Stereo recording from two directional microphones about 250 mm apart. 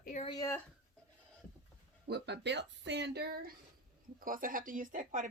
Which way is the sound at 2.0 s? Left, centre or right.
Right.